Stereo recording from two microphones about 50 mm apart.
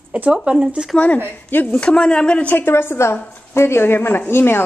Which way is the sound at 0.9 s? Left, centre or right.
Left.